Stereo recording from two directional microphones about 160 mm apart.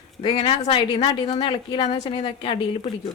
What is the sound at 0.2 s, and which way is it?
Speech, 35° left (ahead or behind).